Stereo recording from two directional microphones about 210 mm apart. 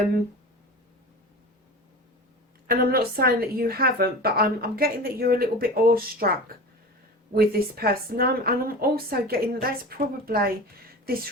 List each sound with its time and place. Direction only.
2.6 s a woman's voice: 45° right (ahead or behind)
7.3 s a woman's voice: 45° right (ahead or behind)